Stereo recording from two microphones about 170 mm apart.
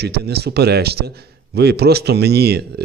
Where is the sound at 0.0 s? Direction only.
70° right (ahead or behind).